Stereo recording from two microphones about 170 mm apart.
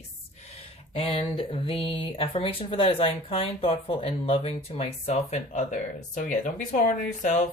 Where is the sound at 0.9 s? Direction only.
35° left (ahead or behind).